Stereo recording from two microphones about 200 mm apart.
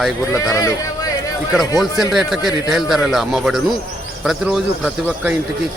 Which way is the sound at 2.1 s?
Centre (ahead or behind).